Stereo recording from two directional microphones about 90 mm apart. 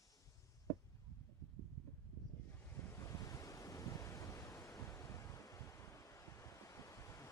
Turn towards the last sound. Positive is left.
turn(degrees=35)  # may be behind; listen again after turning